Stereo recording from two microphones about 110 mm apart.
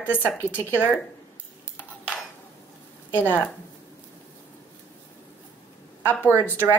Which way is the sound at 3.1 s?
15° left (ahead or behind).